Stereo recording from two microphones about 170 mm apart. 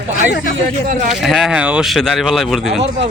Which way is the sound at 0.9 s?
50° right (ahead or behind).